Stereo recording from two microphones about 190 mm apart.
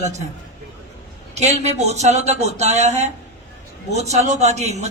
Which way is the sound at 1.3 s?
35° right (ahead or behind).